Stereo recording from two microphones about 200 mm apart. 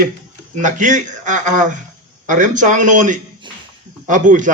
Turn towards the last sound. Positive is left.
turn(degrees=-40)  # may be behind; listen again after turning